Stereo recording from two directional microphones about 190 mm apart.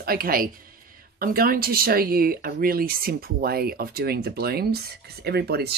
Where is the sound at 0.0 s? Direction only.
50° right (ahead or behind).